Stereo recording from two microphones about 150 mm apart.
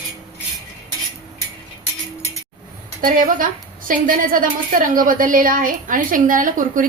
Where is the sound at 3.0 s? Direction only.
65° right (ahead or behind).